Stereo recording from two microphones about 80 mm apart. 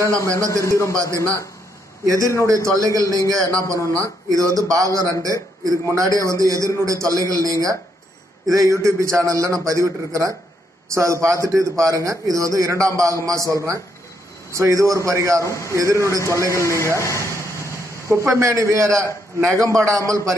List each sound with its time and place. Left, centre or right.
0.7 s a man's voice: left
1.1 s a man's voice: right
15.4 s a man's voice: left
15.7 s a man's voice: right
17.0 s a sound: left
18.0 s a man's voice: right